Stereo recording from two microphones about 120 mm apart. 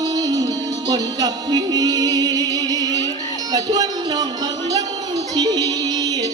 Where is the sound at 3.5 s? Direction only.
35° right (ahead or behind).